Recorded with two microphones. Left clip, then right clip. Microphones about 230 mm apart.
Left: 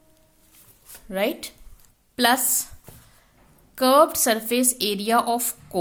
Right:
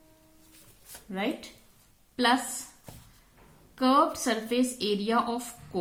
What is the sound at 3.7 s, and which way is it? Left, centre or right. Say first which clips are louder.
A woman's voice: left 7 dB; left.